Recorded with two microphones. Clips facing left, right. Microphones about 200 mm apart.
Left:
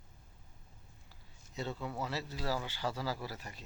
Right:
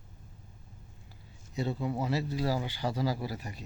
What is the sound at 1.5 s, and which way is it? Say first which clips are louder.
Speech: right 7 dB; 15° right (ahead or behind).